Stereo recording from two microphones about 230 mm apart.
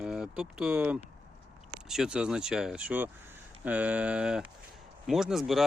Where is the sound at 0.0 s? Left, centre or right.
Centre.